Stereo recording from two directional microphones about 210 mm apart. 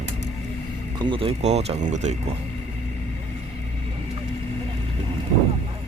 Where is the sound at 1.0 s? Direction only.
25° right (ahead or behind).